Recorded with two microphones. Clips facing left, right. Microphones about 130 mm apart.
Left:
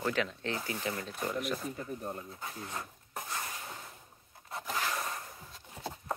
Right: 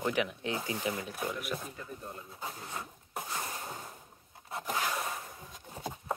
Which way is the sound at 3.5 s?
35° right (ahead or behind).